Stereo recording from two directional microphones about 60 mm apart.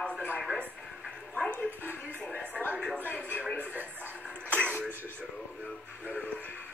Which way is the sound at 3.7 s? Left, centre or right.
Right.